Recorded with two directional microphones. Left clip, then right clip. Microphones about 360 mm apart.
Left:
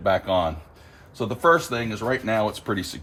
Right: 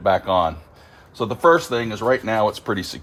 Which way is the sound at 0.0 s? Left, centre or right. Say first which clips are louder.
Right 4 dB; centre.